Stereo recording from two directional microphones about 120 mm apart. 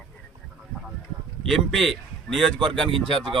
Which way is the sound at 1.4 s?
Centre (ahead or behind).